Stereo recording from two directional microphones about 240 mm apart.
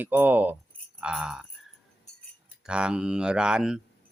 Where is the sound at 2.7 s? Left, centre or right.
Centre.